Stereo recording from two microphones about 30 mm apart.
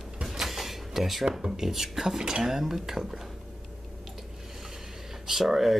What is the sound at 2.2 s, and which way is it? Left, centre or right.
Speech, right.